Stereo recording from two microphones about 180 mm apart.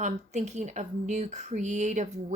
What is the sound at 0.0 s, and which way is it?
Speech, 40° right (ahead or behind).